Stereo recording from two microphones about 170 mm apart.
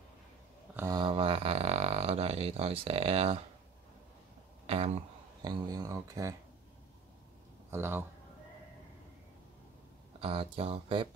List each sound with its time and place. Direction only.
0.7 s a sound: 20° right (ahead or behind)
1.0 s a sound: 35° right (ahead or behind)
4.6 s speech: 35° right (ahead or behind)
5.4 s speech: 25° right (ahead or behind)
7.7 s speech: 15° right (ahead or behind)
10.2 s speech: 35° right (ahead or behind)